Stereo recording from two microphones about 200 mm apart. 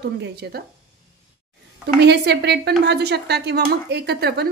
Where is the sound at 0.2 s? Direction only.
55° right (ahead or behind).